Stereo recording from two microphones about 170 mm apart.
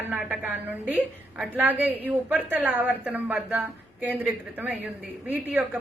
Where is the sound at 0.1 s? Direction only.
5° right (ahead or behind).